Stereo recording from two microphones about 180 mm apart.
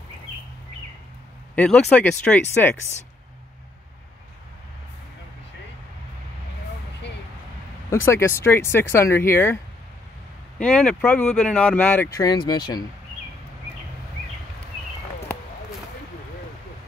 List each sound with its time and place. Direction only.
1.5 s speech: 5° left (ahead or behind)
7.9 s speech: 15° left (ahead or behind)
10.6 s speech: 5° left (ahead or behind)
12.2 s speech: 20° left (ahead or behind)